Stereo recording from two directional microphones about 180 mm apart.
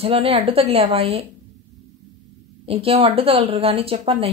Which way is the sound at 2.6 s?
30° right (ahead or behind).